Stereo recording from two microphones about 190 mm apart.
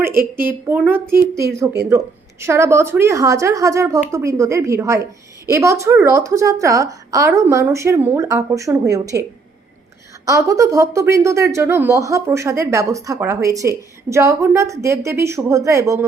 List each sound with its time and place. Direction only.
0.4 s speech: 10° right (ahead or behind)
10.2 s speech: 15° right (ahead or behind)